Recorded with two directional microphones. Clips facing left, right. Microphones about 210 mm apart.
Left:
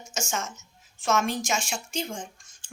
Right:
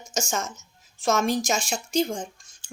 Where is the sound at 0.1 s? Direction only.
35° right (ahead or behind).